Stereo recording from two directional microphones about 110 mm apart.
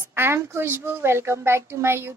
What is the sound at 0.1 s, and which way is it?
A child's voice, 20° right (ahead or behind).